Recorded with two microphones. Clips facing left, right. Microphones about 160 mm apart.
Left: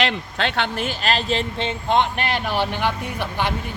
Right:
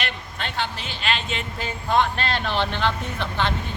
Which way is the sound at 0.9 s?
40° left (ahead or behind).